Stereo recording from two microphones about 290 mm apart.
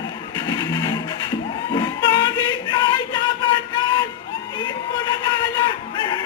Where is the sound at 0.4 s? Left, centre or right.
Centre.